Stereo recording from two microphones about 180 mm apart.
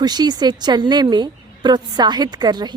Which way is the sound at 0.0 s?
25° right (ahead or behind).